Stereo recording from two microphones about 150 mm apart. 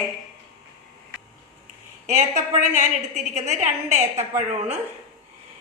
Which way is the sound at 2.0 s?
50° right (ahead or behind).